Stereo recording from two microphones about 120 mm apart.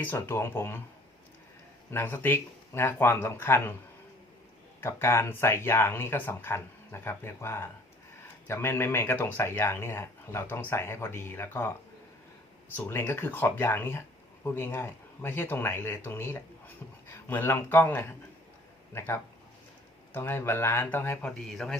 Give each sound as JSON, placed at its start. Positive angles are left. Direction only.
{"t": 0.0, "sound": "speech", "side_deg": 15}
{"t": 1.9, "sound": "speech", "side_deg": 20}
{"t": 4.8, "sound": "speech", "side_deg": 20}
{"t": 12.7, "sound": "speech", "side_deg": 15}
{"t": 21.2, "sound": "a man's voice", "side_deg": 5}